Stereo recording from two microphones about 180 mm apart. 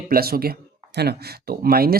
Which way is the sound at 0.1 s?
55° right (ahead or behind).